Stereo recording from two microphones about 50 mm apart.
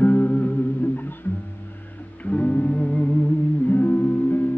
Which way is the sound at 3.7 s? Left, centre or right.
Left.